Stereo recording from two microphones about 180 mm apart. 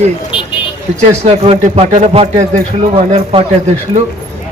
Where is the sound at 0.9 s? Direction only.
40° right (ahead or behind).